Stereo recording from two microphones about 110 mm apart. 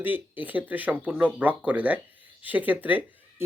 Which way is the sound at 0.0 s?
15° right (ahead or behind).